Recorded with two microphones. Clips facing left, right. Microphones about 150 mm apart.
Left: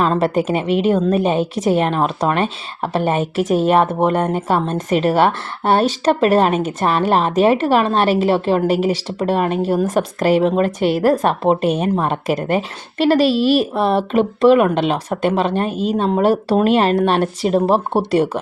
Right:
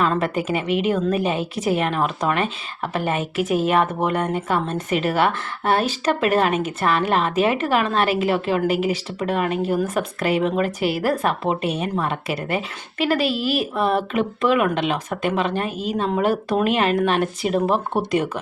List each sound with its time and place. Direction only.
0.0 s speech: 35° left (ahead or behind)
10.8 s a woman's voice: 5° right (ahead or behind)
11.0 s speech: 40° left (ahead or behind)